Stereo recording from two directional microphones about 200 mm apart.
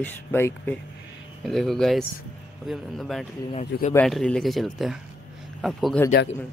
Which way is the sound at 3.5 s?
35° left (ahead or behind).